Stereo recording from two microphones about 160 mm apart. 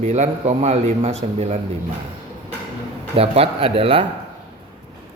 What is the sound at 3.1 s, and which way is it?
Speech, 35° right (ahead or behind).